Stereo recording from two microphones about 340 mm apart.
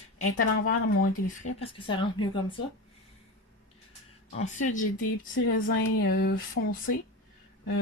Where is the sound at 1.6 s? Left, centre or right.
Centre.